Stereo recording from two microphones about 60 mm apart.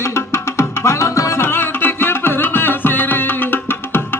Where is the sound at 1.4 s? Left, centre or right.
Left.